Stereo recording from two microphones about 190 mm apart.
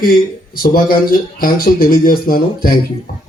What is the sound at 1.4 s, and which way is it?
Speech, 50° left (ahead or behind).